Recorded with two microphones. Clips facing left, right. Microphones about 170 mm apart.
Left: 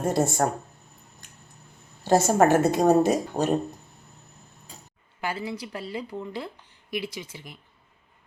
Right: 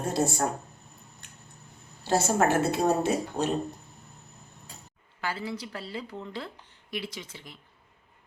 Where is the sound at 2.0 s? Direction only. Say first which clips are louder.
Left 5 dB; 45° left (ahead or behind).